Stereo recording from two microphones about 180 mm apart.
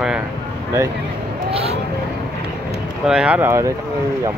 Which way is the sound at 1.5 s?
35° right (ahead or behind).